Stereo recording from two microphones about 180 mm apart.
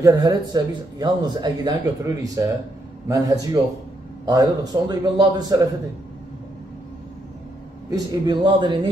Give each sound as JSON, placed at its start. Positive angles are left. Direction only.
{"t": 0.0, "sound": "speech", "side_deg": -20}
{"t": 7.9, "sound": "speech", "side_deg": -25}